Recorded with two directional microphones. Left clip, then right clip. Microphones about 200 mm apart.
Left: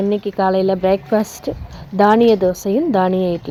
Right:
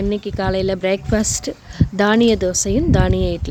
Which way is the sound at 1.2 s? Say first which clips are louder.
Right 3 dB; 35° right (ahead or behind).